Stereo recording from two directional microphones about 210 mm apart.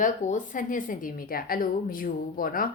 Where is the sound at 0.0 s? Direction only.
40° left (ahead or behind).